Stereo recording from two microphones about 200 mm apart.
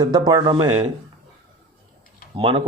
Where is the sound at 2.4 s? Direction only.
25° right (ahead or behind).